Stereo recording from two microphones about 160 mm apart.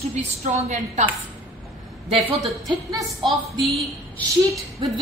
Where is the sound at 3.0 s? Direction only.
Centre (ahead or behind).